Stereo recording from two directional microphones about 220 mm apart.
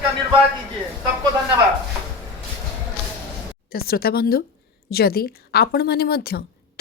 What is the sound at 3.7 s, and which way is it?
Speech, 45° left (ahead or behind).